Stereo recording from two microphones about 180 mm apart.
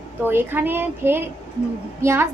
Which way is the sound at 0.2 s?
10° right (ahead or behind).